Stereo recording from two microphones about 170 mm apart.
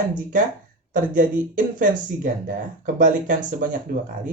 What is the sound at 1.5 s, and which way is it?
Speech, 50° right (ahead or behind).